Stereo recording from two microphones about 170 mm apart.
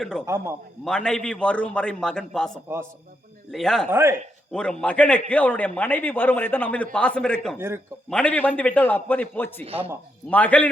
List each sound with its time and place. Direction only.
0.0 s a man's voice: 5° left (ahead or behind)
0.3 s a man's voice: 15° right (ahead or behind)
0.9 s a man's voice: 5° left (ahead or behind)
3.8 s a man's voice: 15° right (ahead or behind)
4.5 s a man's voice: 5° left (ahead or behind)
9.6 s speech: 35° right (ahead or behind)
10.2 s a man's voice: 10° left (ahead or behind)